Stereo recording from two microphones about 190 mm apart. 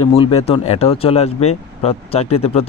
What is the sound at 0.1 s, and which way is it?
Speech, 30° left (ahead or behind).